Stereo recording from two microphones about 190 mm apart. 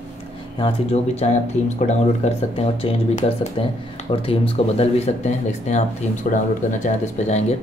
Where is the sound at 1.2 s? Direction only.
35° left (ahead or behind).